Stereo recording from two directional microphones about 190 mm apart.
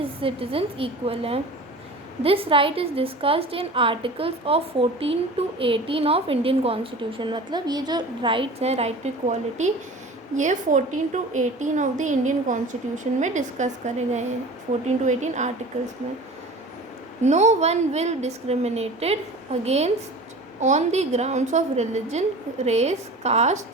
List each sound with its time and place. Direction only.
0.0 s a woman's voice: 30° right (ahead or behind)
17.2 s a woman's voice: 35° right (ahead or behind)